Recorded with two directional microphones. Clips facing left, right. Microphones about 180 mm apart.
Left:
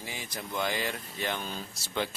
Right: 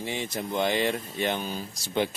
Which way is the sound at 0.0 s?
25° right (ahead or behind).